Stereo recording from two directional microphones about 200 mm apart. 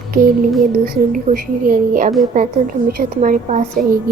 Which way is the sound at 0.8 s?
45° right (ahead or behind).